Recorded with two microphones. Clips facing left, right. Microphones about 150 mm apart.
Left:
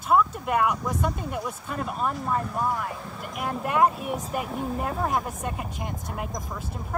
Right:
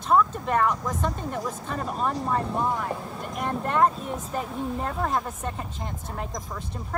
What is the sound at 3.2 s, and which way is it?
Speech, 5° left (ahead or behind).